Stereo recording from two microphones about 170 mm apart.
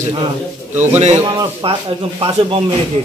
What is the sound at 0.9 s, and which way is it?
A man's voice, 40° right (ahead or behind).